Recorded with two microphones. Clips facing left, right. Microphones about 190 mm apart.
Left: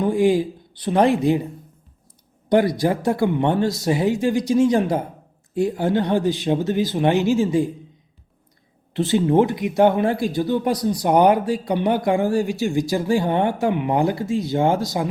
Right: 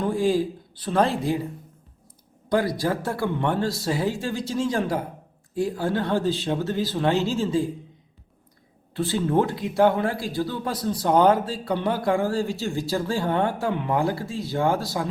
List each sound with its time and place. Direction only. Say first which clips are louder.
0.0 s speech: left 4 dB; 20° left (ahead or behind)
2.5 s speech: left 5 dB; 20° left (ahead or behind)
8.9 s speech: left 6 dB; 20° left (ahead or behind)